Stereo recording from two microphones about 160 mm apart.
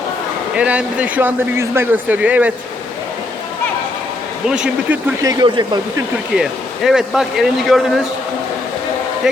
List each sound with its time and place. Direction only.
0.5 s speech: 5° right (ahead or behind)
4.4 s speech: 5° right (ahead or behind)
5.2 s speech: 25° right (ahead or behind)
6.3 s speech: 5° right (ahead or behind)
9.2 s speech: 5° right (ahead or behind)